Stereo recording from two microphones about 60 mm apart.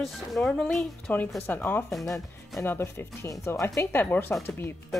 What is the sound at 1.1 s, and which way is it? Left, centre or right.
Speech, left.